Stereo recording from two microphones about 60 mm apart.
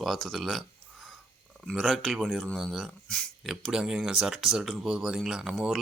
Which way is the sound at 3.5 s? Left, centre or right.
Centre.